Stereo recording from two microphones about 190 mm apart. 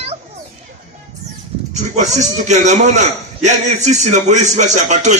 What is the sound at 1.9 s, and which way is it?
A man's voice, 40° right (ahead or behind).